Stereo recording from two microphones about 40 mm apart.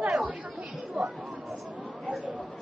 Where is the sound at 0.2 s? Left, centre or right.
Right.